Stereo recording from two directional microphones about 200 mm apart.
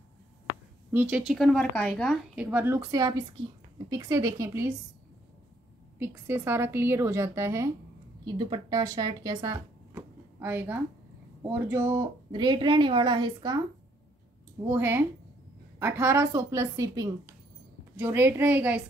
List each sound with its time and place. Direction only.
0.9 s speech: 5° right (ahead or behind)
2.3 s speech: 10° right (ahead or behind)
5.9 s a woman's voice: 10° right (ahead or behind)
14.7 s speech: 10° right (ahead or behind)